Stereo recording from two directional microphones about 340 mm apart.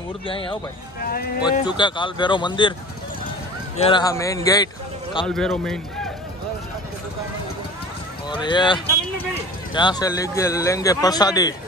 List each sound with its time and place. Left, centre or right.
0.3 s a man's voice: centre
3.7 s a man's voice: centre
8.3 s a man's voice: centre